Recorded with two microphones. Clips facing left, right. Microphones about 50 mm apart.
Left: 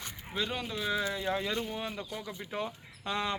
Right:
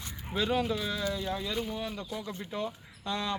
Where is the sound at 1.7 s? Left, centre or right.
Left.